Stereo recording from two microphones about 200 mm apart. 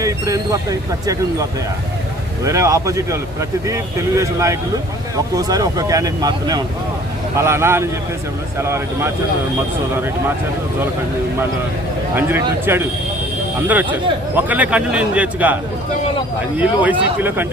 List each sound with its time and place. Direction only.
0.0 s speech: 15° right (ahead or behind)
12.1 s speech: 10° right (ahead or behind)
14.3 s speech: 10° right (ahead or behind)
16.6 s speech: 10° right (ahead or behind)